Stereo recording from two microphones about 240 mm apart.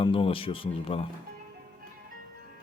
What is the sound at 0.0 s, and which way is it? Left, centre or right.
Speech, left.